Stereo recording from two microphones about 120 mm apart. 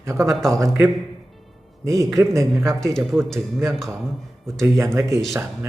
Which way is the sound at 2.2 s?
25° right (ahead or behind).